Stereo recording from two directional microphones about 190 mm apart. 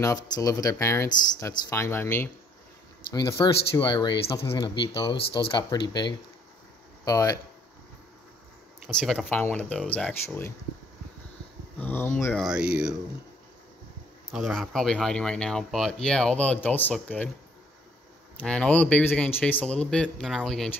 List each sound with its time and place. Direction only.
0.0 s speech: 15° left (ahead or behind)
8.8 s speech: centre (ahead or behind)
11.8 s speech: 10° left (ahead or behind)
12.4 s speech: 5° right (ahead or behind)
14.3 s speech: centre (ahead or behind)
18.4 s speech: 5° left (ahead or behind)